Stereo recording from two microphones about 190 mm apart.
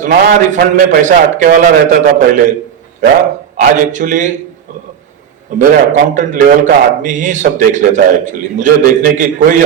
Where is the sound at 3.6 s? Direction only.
45° right (ahead or behind).